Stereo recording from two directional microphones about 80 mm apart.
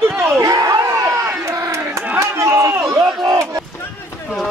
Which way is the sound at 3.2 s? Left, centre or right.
Right.